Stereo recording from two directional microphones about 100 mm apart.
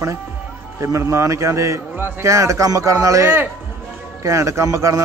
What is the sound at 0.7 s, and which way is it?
A man's voice, 30° right (ahead or behind).